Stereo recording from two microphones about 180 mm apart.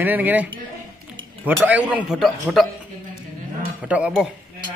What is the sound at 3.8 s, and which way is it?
Speech, 5° right (ahead or behind).